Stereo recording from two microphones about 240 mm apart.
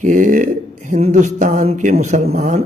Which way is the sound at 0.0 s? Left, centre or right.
Right.